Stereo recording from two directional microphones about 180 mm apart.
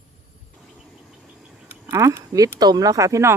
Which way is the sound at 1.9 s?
15° right (ahead or behind).